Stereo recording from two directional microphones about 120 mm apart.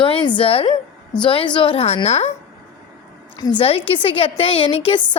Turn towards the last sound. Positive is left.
turn(degrees=50)  # may be behind; listen again after turning